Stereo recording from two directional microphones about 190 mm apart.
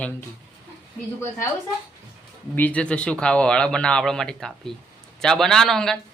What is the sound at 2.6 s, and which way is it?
A man's voice, 5° left (ahead or behind).